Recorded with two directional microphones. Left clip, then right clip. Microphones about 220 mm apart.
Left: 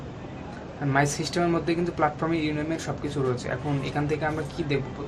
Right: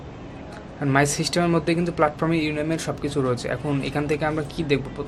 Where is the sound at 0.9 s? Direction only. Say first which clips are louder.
Right 4 dB; 50° right (ahead or behind).